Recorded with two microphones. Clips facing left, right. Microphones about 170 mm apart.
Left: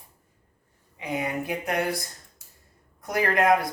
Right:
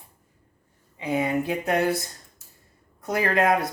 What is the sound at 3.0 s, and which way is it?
Speech, 25° right (ahead or behind).